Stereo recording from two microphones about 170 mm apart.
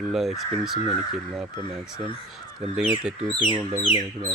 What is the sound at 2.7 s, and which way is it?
Speech, 5° right (ahead or behind).